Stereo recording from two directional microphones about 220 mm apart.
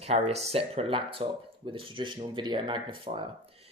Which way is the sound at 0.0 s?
30° right (ahead or behind).